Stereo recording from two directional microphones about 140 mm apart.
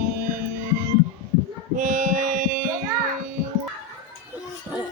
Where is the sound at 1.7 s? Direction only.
70° right (ahead or behind).